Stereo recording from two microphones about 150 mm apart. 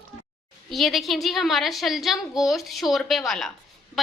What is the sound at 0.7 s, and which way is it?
A woman's voice, centre (ahead or behind).